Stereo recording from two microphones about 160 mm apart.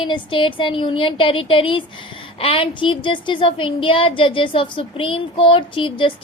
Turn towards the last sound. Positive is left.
turn(degrees=30)  # may be behind; listen again after turning